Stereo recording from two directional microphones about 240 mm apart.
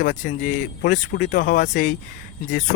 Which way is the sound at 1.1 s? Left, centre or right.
Left.